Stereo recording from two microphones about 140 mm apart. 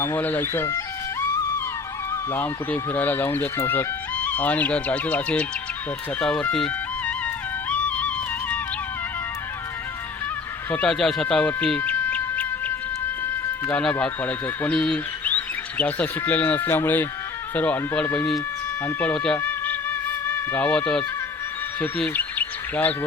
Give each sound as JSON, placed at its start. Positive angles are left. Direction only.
{"t": 0.0, "sound": "speech", "side_deg": 15}
{"t": 2.3, "sound": "speech", "side_deg": 15}
{"t": 7.7, "sound": "music", "side_deg": 10}
{"t": 10.7, "sound": "music", "side_deg": 5}
{"t": 14.0, "sound": "speech", "side_deg": 10}
{"t": 18.9, "sound": "music", "side_deg": 10}
{"t": 21.8, "sound": "bird", "side_deg": 10}